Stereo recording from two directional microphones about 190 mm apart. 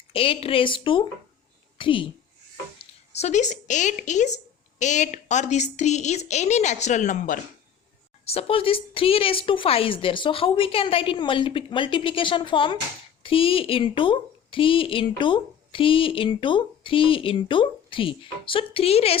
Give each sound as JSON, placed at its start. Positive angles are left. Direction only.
{"t": 0.1, "sound": "speech", "side_deg": 30}
{"t": 3.1, "sound": "a woman's voice", "side_deg": 35}